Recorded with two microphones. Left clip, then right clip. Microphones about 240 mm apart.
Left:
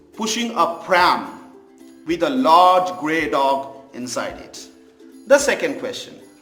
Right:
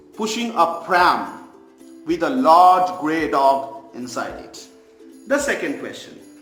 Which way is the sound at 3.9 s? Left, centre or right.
Centre.